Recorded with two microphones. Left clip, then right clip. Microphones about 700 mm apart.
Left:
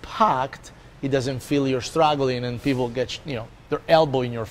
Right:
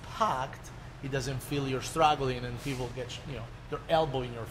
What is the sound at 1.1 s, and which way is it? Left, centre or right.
Speech, left.